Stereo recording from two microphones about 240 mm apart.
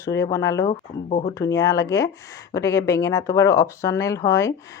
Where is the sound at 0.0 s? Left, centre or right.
Centre.